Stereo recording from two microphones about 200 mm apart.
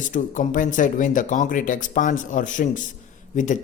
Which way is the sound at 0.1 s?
40° left (ahead or behind).